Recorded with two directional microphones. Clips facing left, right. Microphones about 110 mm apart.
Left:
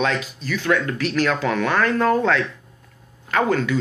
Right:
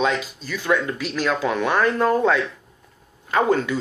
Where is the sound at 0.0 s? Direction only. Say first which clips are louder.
Even; 20° right (ahead or behind).